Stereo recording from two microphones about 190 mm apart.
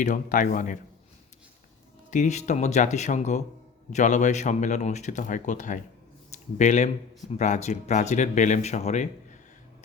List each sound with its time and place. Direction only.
0.0 s speech: 45° left (ahead or behind)
2.0 s speech: 40° left (ahead or behind)